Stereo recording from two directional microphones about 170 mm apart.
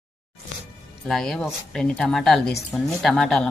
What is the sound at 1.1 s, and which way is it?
Speech, centre (ahead or behind).